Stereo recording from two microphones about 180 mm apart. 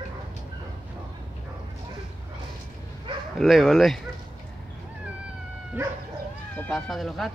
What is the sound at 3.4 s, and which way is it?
Speech, centre (ahead or behind).